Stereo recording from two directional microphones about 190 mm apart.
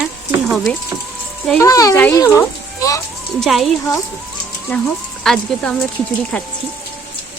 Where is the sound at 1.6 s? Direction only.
15° left (ahead or behind).